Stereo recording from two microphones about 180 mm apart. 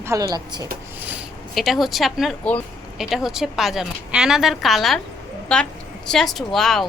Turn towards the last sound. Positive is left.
turn(degrees=0)  # may be behind; listen again after turning